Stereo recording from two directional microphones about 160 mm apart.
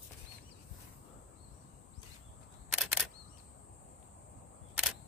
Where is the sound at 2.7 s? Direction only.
Centre (ahead or behind).